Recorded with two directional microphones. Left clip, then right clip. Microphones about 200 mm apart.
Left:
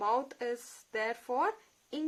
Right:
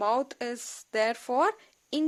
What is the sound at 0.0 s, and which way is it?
A woman's voice, 45° right (ahead or behind).